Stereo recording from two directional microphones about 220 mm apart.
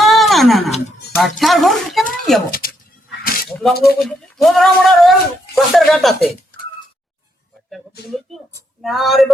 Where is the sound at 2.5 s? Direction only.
40° left (ahead or behind).